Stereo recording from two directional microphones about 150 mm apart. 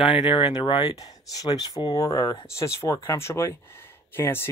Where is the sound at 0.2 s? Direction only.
35° left (ahead or behind).